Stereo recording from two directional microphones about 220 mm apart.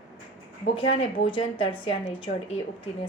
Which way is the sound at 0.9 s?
25° left (ahead or behind).